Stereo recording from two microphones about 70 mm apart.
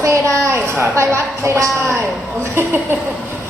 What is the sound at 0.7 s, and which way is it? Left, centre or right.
Speech, right.